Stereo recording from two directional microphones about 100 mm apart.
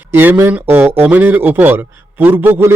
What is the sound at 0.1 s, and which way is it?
A man's voice, 20° right (ahead or behind).